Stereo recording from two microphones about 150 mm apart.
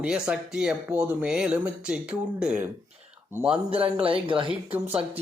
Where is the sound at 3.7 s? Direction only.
40° right (ahead or behind).